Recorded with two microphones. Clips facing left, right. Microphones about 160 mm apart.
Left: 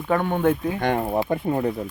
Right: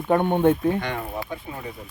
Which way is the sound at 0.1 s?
25° right (ahead or behind).